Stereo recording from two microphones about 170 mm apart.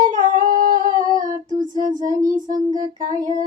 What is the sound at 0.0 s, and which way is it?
Humming, 50° right (ahead or behind).